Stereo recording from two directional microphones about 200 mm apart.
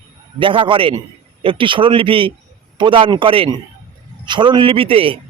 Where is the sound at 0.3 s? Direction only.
25° right (ahead or behind).